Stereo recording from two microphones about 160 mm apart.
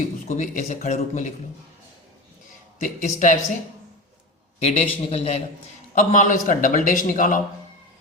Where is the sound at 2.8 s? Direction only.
50° left (ahead or behind).